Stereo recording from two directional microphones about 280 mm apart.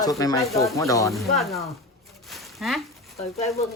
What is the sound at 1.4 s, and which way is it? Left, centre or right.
Speech, centre.